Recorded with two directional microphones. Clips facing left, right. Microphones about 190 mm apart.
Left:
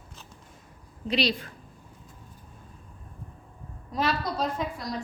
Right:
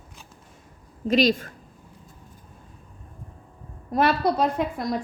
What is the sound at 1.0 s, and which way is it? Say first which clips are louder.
Speech: right 7 dB; 45° right (ahead or behind).